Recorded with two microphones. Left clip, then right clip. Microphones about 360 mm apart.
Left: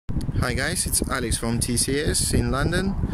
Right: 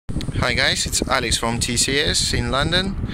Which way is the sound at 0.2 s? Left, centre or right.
Centre.